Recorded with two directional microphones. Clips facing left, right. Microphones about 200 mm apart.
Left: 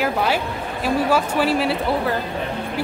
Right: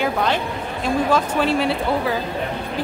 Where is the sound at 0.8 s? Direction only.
5° left (ahead or behind).